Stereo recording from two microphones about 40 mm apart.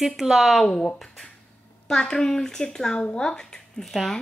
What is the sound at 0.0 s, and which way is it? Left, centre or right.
Speech, centre.